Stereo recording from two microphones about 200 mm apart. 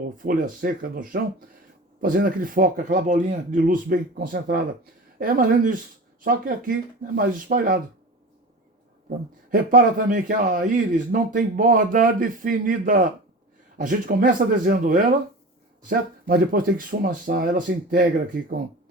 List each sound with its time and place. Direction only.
0.2 s a man's voice: 45° right (ahead or behind)
9.0 s a man's voice: 45° right (ahead or behind)